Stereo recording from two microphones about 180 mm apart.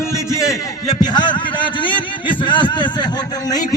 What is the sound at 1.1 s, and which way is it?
Speech, 25° left (ahead or behind).